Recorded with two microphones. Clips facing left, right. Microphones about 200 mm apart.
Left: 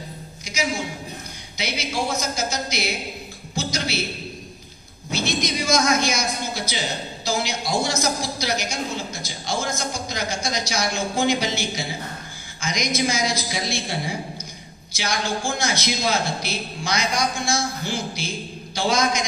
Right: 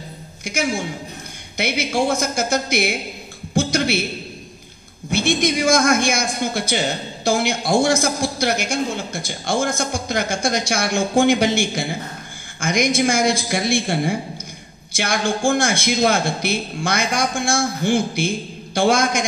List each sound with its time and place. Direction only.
1.6 s a man's voice: 50° right (ahead or behind)
3.5 s a sound: 55° right (ahead or behind)
5.1 s a man's voice: 55° right (ahead or behind)